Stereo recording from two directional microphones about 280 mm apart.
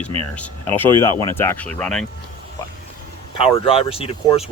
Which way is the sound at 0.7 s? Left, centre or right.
Centre.